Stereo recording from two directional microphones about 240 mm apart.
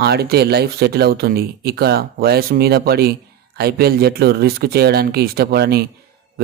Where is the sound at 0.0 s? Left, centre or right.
Right.